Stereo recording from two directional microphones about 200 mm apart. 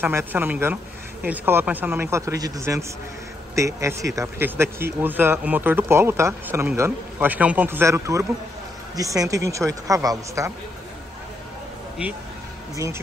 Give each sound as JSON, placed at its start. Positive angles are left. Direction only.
{"t": 0.0, "sound": "speech", "side_deg": -10}
{"t": 12.0, "sound": "speech", "side_deg": -5}